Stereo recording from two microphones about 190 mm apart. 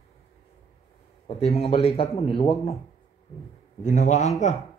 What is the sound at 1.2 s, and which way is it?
Speech, 30° left (ahead or behind).